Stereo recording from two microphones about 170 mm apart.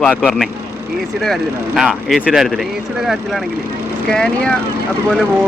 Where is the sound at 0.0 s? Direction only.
5° left (ahead or behind).